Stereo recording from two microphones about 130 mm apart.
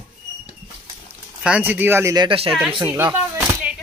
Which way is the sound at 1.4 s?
10° right (ahead or behind).